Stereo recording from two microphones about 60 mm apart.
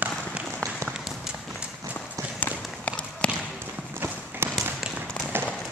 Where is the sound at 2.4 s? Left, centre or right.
Left.